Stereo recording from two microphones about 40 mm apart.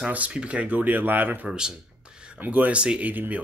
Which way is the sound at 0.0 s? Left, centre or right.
Right.